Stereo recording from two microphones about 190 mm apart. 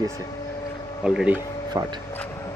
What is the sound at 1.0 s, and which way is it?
Speech, 5° right (ahead or behind).